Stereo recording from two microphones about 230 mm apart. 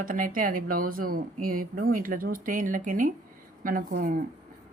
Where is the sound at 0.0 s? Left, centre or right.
Right.